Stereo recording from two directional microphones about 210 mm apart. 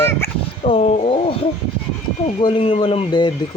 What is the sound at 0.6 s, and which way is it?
Speech, 30° left (ahead or behind).